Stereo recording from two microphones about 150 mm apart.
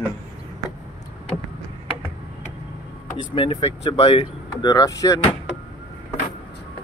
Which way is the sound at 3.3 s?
35° left (ahead or behind).